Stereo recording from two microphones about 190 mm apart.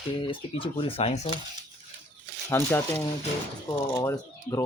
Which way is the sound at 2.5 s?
10° left (ahead or behind).